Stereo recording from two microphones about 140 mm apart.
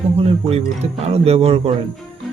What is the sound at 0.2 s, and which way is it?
Speech, 45° right (ahead or behind).